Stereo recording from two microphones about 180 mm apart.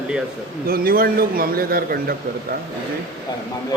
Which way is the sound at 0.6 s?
55° right (ahead or behind).